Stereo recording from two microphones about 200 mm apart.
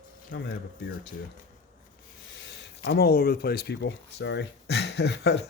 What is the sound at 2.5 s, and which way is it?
Speech, 55° left (ahead or behind).